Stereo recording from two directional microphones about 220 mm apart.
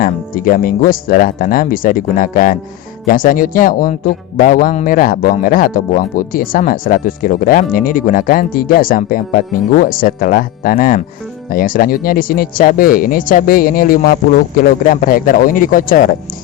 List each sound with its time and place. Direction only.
0.0 s speech: 40° left (ahead or behind)